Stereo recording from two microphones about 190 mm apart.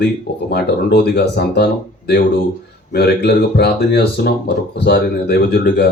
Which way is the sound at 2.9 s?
60° left (ahead or behind).